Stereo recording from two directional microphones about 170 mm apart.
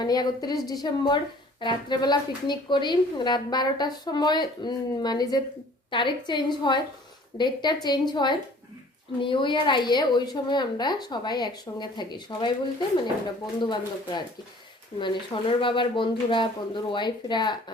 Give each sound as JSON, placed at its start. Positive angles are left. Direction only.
{"t": 0.0, "sound": "speech", "side_deg": 25}
{"t": 13.6, "sound": "speech", "side_deg": 25}